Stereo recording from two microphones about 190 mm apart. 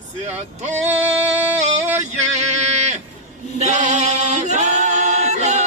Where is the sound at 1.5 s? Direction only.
35° right (ahead or behind).